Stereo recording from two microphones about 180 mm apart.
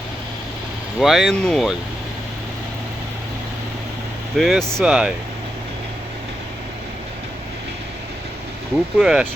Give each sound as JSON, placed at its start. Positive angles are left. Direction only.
{"t": 0.9, "sound": "speech", "side_deg": 0}
{"t": 4.4, "sound": "speech", "side_deg": 0}
{"t": 9.0, "sound": "speech", "side_deg": -5}